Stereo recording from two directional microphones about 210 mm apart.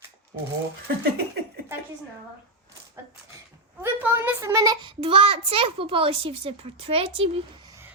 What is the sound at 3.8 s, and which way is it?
A child's voice, 10° right (ahead or behind).